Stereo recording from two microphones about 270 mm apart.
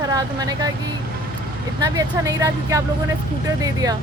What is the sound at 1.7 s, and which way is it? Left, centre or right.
Speech, centre.